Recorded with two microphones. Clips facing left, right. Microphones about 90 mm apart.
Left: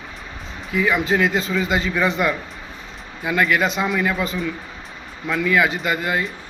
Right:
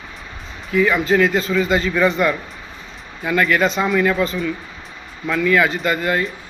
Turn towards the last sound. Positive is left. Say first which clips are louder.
# right 3 dB
turn(degrees=10)  # may be behind; listen again after turning